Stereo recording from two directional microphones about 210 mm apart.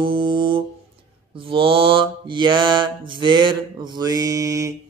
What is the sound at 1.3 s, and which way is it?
Mantra, 25° right (ahead or behind).